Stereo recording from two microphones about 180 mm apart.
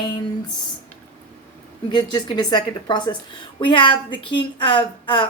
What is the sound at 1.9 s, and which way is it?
A woman's voice, 25° left (ahead or behind).